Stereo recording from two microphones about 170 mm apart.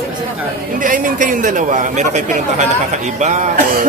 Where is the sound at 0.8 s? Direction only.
50° right (ahead or behind).